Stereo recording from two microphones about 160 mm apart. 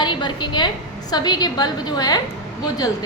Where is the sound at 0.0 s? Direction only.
30° left (ahead or behind).